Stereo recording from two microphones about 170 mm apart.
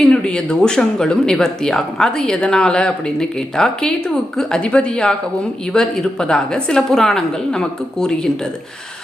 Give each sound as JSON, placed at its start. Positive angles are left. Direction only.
{"t": 0.0, "sound": "speech", "side_deg": 5}